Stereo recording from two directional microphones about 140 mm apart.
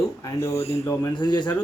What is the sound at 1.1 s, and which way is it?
Speech, 30° left (ahead or behind).